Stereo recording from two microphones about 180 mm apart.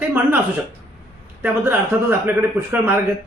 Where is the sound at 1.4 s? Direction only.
10° right (ahead or behind).